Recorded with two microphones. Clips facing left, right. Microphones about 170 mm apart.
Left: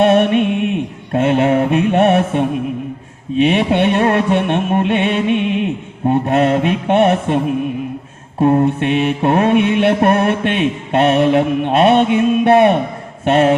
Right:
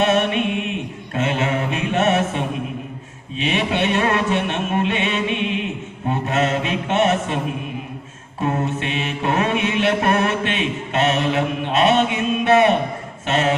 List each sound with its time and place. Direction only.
0.0 s music: 55° left (ahead or behind)
1.1 s mantra: 55° left (ahead or behind)
8.6 s mantra: 55° left (ahead or behind)